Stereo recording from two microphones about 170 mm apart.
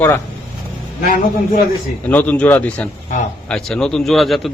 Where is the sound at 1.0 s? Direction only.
55° left (ahead or behind).